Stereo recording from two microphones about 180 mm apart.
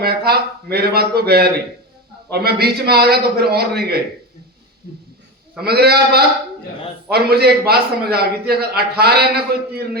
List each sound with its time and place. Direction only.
0.0 s a man's voice: 60° right (ahead or behind)
5.6 s a man's voice: 60° right (ahead or behind)